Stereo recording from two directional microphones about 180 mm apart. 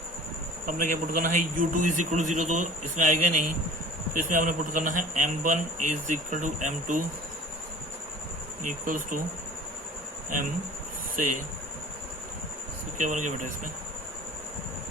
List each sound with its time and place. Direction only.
0.6 s a man's voice: 45° right (ahead or behind)
8.6 s a man's voice: 50° right (ahead or behind)
13.0 s a man's voice: 45° right (ahead or behind)